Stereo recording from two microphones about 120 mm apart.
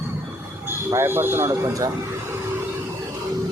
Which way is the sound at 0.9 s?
20° right (ahead or behind).